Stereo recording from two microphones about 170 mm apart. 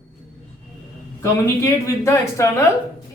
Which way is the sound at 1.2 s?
15° left (ahead or behind).